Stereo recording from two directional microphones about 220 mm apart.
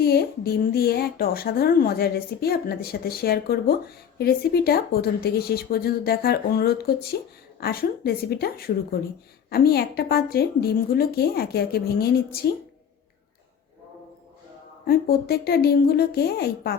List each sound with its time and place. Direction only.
0.0 s a woman's voice: 45° left (ahead or behind)
14.8 s a woman's voice: 45° left (ahead or behind)